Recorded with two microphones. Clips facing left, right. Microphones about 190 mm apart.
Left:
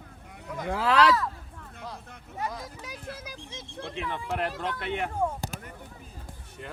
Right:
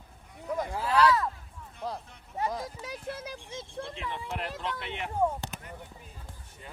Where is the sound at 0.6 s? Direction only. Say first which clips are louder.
Left 2 dB; 90° left.